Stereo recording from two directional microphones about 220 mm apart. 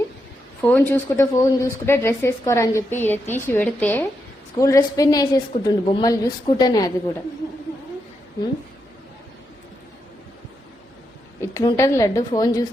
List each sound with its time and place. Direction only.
0.6 s a woman's voice: 10° left (ahead or behind)
11.3 s a woman's voice: 15° left (ahead or behind)